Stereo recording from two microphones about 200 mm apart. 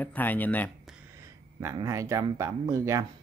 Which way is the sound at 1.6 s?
15° right (ahead or behind).